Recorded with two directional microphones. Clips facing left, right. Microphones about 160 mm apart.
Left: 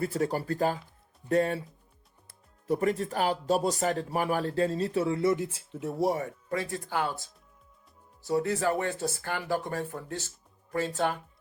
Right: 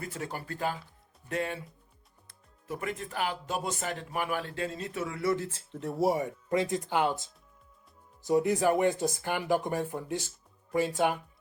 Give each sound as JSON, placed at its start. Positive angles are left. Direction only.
{"t": 0.0, "sound": "speech", "side_deg": 35}
{"t": 5.5, "sound": "speech", "side_deg": 10}
{"t": 6.1, "sound": "speech", "side_deg": -15}